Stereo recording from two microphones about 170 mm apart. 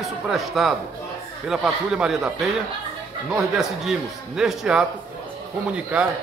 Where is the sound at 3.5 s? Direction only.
Centre (ahead or behind).